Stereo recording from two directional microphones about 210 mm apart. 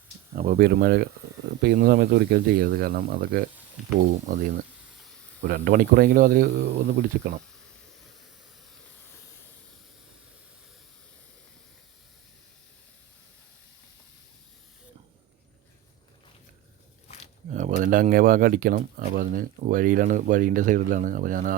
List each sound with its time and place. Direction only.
0.3 s speech: 45° right (ahead or behind)
6.9 s speech: 35° right (ahead or behind)
17.5 s speech: 35° right (ahead or behind)